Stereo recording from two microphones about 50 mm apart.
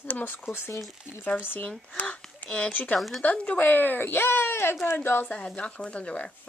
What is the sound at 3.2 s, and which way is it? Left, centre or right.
Speech, left.